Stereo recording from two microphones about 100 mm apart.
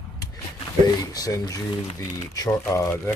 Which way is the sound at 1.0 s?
35° left (ahead or behind).